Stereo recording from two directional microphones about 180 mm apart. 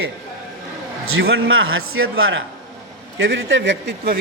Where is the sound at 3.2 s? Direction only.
90° right.